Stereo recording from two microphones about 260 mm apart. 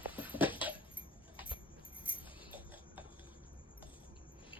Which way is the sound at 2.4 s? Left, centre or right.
Centre.